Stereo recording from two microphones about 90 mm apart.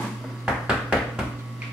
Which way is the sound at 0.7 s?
10° right (ahead or behind).